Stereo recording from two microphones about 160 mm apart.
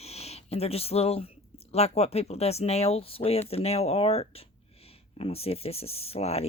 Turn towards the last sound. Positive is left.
turn(degrees=40)  # may be behind; listen again after turning